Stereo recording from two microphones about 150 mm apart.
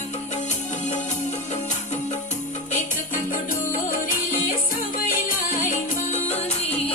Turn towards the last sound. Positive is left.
turn(degrees=55)  # may be behind; listen again after turning